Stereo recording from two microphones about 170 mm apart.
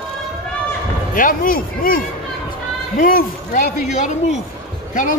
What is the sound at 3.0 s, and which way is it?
Speech, 55° left (ahead or behind).